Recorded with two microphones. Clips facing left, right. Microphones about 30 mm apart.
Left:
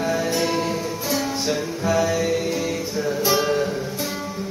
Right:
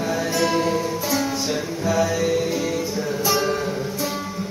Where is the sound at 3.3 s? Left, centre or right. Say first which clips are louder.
Left 1 dB; centre.